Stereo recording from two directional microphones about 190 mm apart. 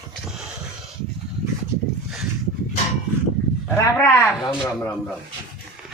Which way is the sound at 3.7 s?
15° left (ahead or behind).